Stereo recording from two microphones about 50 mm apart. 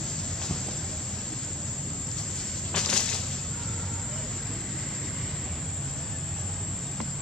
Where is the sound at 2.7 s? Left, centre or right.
Centre.